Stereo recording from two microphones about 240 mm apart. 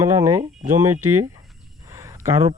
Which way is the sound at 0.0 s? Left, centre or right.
Centre.